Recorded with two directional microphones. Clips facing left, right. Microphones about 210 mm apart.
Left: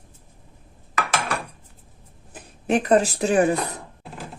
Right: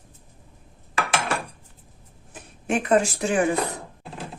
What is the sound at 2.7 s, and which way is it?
Speech, 35° left (ahead or behind).